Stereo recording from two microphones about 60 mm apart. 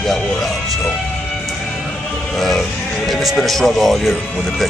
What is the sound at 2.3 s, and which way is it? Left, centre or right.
Music, centre.